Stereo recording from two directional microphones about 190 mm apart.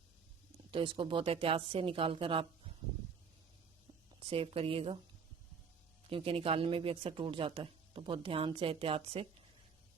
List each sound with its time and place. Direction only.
0.7 s speech: 30° right (ahead or behind)
4.2 s speech: 30° right (ahead or behind)
6.1 s speech: 30° right (ahead or behind)